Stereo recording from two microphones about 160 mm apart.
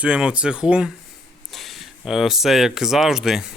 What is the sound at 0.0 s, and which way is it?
Speech, 5° right (ahead or behind).